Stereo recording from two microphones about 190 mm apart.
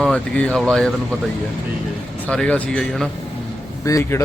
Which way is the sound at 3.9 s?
15° left (ahead or behind).